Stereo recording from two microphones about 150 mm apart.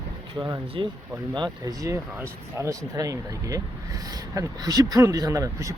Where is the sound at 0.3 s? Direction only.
25° right (ahead or behind).